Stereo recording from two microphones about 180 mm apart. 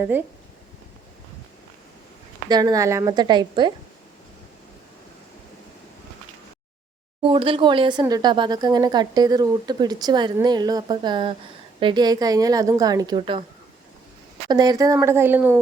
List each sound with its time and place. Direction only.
2.5 s speech: 20° right (ahead or behind)
7.2 s speech: 30° right (ahead or behind)
14.4 s a woman's voice: 20° right (ahead or behind)